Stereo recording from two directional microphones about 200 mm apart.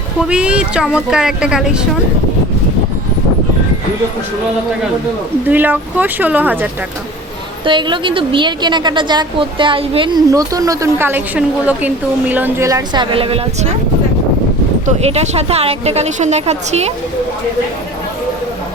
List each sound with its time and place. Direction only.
0.2 s speech: 5° right (ahead or behind)
5.5 s speech: 10° right (ahead or behind)
7.6 s a woman's voice: 25° right (ahead or behind)
14.8 s speech: 35° right (ahead or behind)